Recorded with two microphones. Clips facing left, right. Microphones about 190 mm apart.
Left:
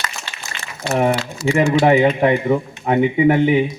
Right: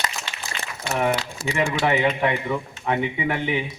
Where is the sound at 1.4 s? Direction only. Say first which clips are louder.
Left 9 dB; 55° right (ahead or behind).